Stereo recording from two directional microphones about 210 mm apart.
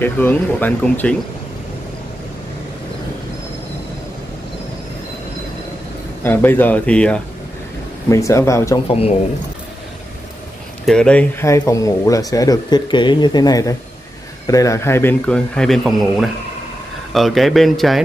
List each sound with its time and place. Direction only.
0.0 s speech: 10° left (ahead or behind)
6.2 s speech: 10° left (ahead or behind)
8.8 s speech: 30° left (ahead or behind)
10.9 s speech: 5° left (ahead or behind)